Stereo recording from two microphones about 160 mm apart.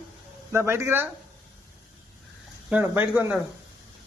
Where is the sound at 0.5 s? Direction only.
15° right (ahead or behind).